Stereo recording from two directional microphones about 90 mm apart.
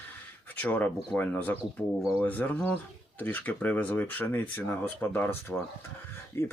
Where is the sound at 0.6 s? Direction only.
15° left (ahead or behind).